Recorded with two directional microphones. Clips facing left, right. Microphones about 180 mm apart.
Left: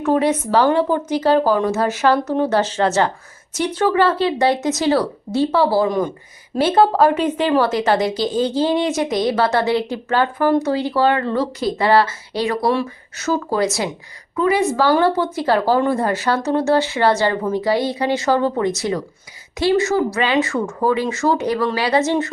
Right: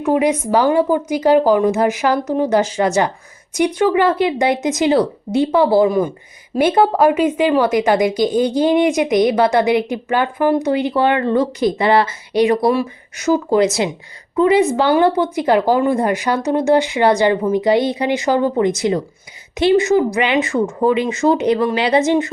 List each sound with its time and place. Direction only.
0.0 s speech: 10° right (ahead or behind)